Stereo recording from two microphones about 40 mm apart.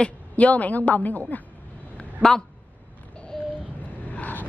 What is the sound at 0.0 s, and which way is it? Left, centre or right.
A woman's voice, left.